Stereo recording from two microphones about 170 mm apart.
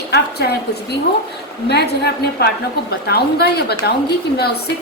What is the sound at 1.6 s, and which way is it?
A woman's voice, 75° left (ahead or behind).